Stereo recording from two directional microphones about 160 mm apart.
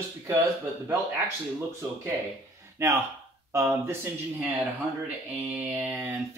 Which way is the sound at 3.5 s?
15° right (ahead or behind).